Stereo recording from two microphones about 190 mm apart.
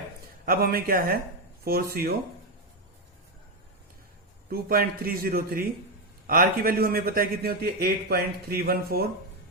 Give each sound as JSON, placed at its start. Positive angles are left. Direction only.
{"t": 0.4, "sound": "a man's voice", "side_deg": -50}
{"t": 4.4, "sound": "a man's voice", "side_deg": -50}